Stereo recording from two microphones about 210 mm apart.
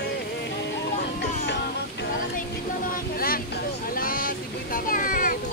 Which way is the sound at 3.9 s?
45° left (ahead or behind).